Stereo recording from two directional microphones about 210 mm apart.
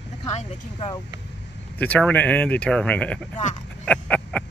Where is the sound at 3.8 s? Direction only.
5° left (ahead or behind).